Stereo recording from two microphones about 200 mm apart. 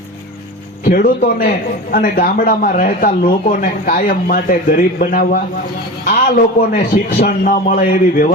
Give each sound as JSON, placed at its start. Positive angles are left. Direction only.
{"t": 0.9, "sound": "a man's voice", "side_deg": 50}